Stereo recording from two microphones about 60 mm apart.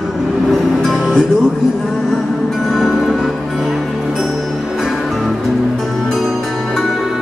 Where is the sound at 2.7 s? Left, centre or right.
Centre.